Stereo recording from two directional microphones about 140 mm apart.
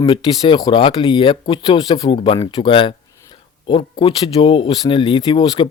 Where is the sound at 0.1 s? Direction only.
35° left (ahead or behind).